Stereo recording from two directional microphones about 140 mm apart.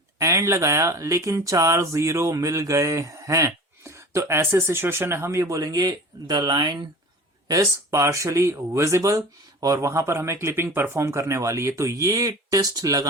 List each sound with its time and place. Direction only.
0.2 s speech: 20° right (ahead or behind)